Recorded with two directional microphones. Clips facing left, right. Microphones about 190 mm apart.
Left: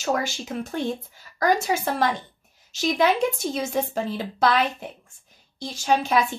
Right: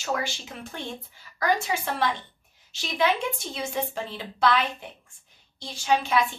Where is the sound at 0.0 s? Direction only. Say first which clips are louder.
Left 4 dB; 45° left (ahead or behind).